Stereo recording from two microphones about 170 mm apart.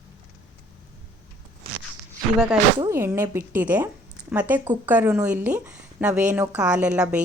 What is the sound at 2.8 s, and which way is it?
A woman's voice, 15° right (ahead or behind).